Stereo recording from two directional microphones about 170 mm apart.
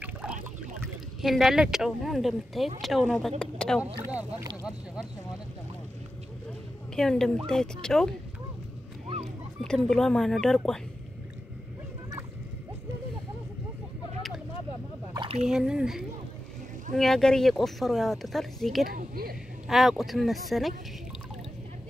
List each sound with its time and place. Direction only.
0.0 s a sound: 5° right (ahead or behind)
1.2 s speech: centre (ahead or behind)
4.0 s speech: 10° right (ahead or behind)
7.0 s speech: 5° left (ahead or behind)
9.6 s speech: 5° left (ahead or behind)
15.1 s a sound: 35° right (ahead or behind)
15.4 s speech: 5° right (ahead or behind)
18.9 s speech: 60° right (ahead or behind)
19.7 s speech: centre (ahead or behind)